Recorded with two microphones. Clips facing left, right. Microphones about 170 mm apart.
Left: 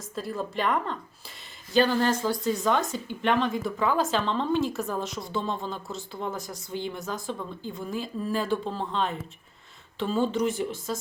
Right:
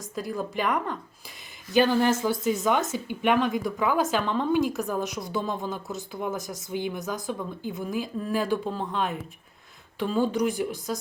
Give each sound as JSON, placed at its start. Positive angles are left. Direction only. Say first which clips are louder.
{"t": 0.2, "sound": "speech", "louder": "right 1 dB", "side_deg": 0}
{"t": 1.7, "sound": "a woman's voice", "louder": "right 2 dB", "side_deg": -15}
{"t": 3.8, "sound": "a woman's voice", "louder": "even", "side_deg": -5}
{"t": 4.7, "sound": "speech", "louder": "right 2 dB", "side_deg": 0}
{"t": 5.7, "sound": "a woman's voice", "louder": "right 2 dB", "side_deg": -15}
{"t": 7.7, "sound": "a woman's voice", "louder": "right 2 dB", "side_deg": 0}
{"t": 10.7, "sound": "a woman's voice", "louder": "right 1 dB", "side_deg": -15}